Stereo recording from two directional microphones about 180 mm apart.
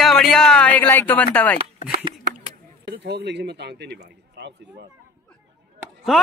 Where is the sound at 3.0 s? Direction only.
70° right (ahead or behind).